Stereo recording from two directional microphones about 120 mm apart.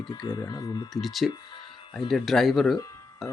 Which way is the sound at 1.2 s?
40° left (ahead or behind).